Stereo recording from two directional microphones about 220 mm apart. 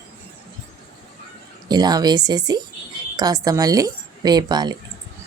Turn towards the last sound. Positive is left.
turn(degrees=-20)  # may be behind; listen again after turning